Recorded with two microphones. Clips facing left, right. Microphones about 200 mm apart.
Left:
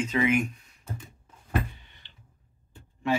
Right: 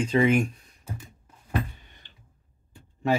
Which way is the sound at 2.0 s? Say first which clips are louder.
Right 1 dB; 45° right (ahead or behind).